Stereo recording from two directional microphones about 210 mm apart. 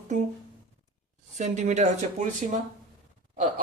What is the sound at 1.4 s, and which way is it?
Speech, 35° right (ahead or behind).